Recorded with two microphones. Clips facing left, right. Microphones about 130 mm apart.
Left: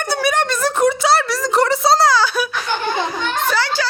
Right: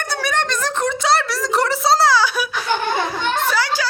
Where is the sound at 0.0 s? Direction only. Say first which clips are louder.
Left 4 dB; 10° left (ahead or behind).